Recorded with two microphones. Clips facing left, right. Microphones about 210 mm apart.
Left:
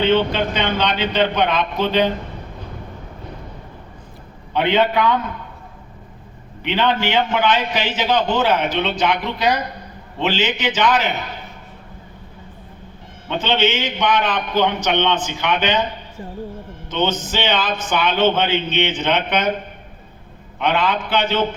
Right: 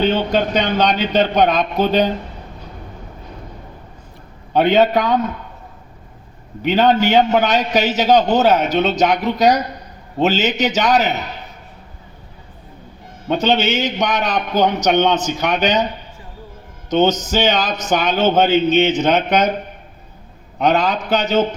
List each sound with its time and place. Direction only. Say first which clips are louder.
0.0 s speech: even; 40° right (ahead or behind)
4.5 s speech: right 4 dB; 40° right (ahead or behind)
6.6 s a man's voice: right 5 dB; 40° right (ahead or behind)
13.2 s a man's voice: right 3 dB; 40° right (ahead or behind)
16.9 s a man's voice: right 6 dB; 40° right (ahead or behind)
20.6 s a man's voice: right 3 dB; 40° right (ahead or behind)